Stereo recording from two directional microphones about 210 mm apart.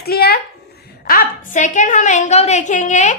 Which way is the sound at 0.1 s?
50° left (ahead or behind).